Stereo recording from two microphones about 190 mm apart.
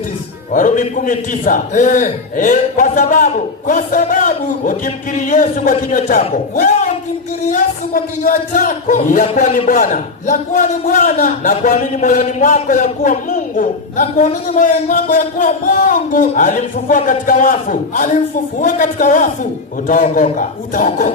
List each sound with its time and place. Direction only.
0.5 s speech: 45° left (ahead or behind)